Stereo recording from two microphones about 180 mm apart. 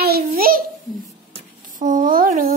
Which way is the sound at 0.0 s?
55° right (ahead or behind).